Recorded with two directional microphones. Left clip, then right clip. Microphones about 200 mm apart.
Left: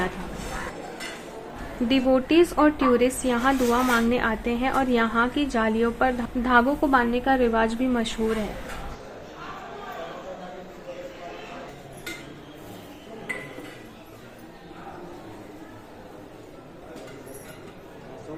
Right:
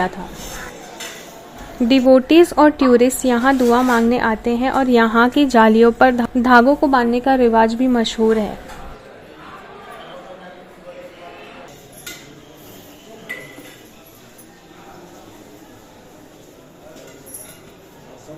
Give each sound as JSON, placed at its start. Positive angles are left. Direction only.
{"t": 1.9, "sound": "a woman's voice", "side_deg": -40}